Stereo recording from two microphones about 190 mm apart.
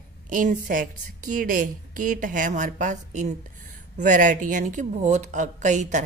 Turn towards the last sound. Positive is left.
turn(degrees=-40)  # may be behind; listen again after turning